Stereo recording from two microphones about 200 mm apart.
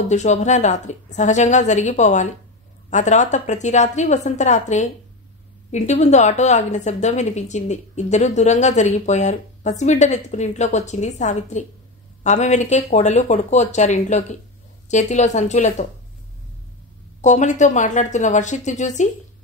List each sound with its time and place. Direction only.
0.1 s a woman's voice: 35° left (ahead or behind)
17.2 s a woman's voice: 35° left (ahead or behind)